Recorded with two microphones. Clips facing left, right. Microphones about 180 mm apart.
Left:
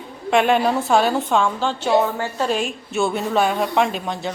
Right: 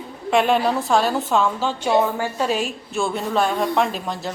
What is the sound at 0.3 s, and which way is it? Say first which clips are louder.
A woman's voice: left 1 dB; centre (ahead or behind).